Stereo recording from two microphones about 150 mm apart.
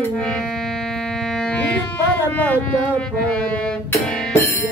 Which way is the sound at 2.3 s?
10° left (ahead or behind).